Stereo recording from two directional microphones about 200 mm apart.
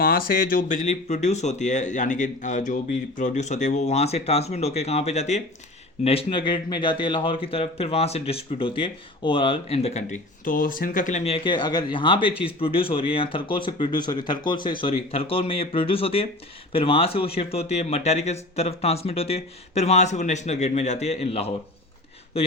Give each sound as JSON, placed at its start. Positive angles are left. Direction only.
{"t": 0.0, "sound": "a man's voice", "side_deg": 45}